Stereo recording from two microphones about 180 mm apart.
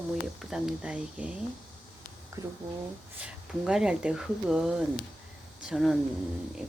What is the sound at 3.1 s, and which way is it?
Speech, 5° right (ahead or behind).